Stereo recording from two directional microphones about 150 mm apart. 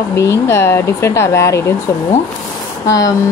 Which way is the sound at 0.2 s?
20° left (ahead or behind).